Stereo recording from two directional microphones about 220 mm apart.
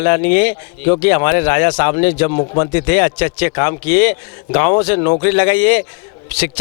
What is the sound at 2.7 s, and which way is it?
Speech, 15° left (ahead or behind).